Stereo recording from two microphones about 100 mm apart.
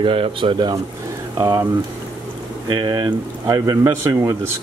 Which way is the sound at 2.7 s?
45° right (ahead or behind).